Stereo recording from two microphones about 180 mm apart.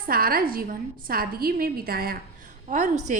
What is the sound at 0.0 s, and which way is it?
A woman's voice, 55° right (ahead or behind).